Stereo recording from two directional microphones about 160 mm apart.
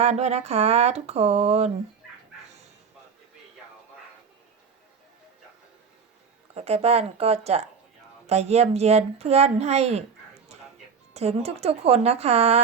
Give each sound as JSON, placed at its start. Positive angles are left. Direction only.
{"t": 0.0, "sound": "a sound", "side_deg": -45}
{"t": 6.5, "sound": "a woman's voice", "side_deg": -40}
{"t": 11.1, "sound": "a woman's voice", "side_deg": -40}